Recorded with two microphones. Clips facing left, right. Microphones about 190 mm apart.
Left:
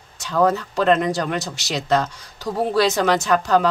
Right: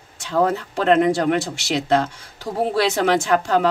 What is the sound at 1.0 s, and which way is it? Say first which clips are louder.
Speech: right 5 dB; 25° right (ahead or behind).